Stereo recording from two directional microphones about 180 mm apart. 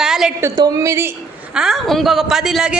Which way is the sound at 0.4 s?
20° right (ahead or behind).